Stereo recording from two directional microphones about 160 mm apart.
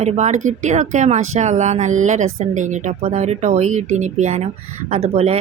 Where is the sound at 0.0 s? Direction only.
45° right (ahead or behind).